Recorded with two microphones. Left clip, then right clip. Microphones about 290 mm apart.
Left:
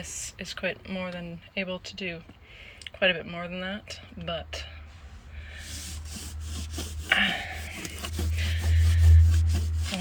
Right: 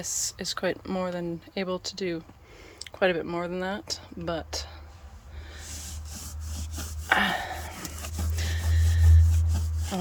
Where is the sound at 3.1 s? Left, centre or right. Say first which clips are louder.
Right 4 dB; right.